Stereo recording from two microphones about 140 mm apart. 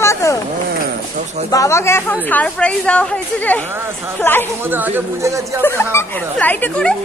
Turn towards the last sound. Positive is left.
turn(degrees=10)  # may be behind; listen again after turning